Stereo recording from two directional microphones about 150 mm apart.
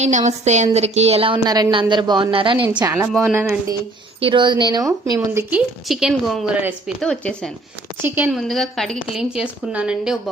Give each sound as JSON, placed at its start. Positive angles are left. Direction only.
{"t": 0.0, "sound": "a woman's voice", "side_deg": -50}
{"t": 3.1, "sound": "a woman's voice", "side_deg": 0}
{"t": 4.2, "sound": "speech", "side_deg": -35}
{"t": 6.6, "sound": "speech", "side_deg": -10}
{"t": 7.0, "sound": "a woman's voice", "side_deg": 5}
{"t": 8.0, "sound": "speech", "side_deg": -10}
{"t": 8.3, "sound": "a woman's voice", "side_deg": 0}